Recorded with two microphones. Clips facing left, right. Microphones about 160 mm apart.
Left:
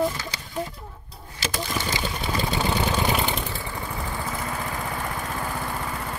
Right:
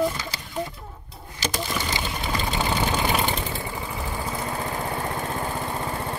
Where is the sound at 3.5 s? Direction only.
15° right (ahead or behind).